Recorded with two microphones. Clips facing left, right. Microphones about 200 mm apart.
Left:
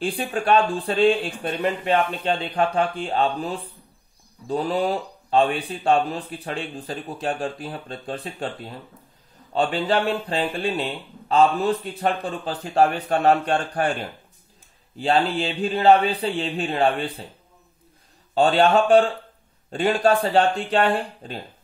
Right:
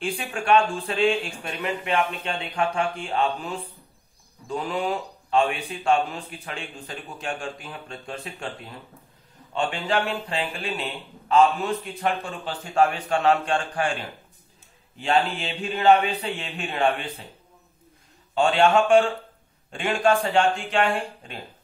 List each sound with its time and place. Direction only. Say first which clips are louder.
0.0 s speech: left 4 dB; 35° left (ahead or behind)
15.0 s speech: left 2 dB; 35° left (ahead or behind)
18.3 s speech: left 2 dB; 35° left (ahead or behind)